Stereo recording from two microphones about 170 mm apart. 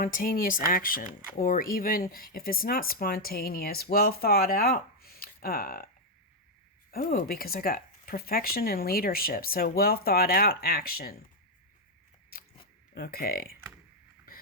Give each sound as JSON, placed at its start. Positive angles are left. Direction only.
{"t": 0.0, "sound": "speech", "side_deg": 55}
{"t": 6.9, "sound": "speech", "side_deg": 55}
{"t": 12.9, "sound": "speech", "side_deg": 65}